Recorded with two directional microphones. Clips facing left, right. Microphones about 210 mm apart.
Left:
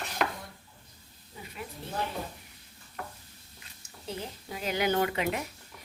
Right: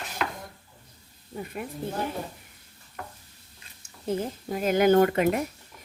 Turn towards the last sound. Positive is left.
turn(degrees=-50)  # may be behind; listen again after turning